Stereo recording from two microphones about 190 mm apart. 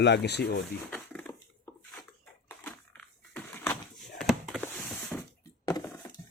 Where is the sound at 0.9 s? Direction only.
10° left (ahead or behind).